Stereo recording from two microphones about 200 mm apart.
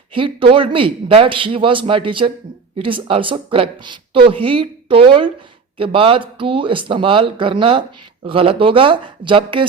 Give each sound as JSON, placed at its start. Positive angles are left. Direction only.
{"t": 0.1, "sound": "speech", "side_deg": -25}